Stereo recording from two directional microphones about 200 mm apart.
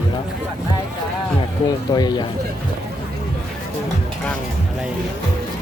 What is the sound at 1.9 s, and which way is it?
Speech, 20° left (ahead or behind).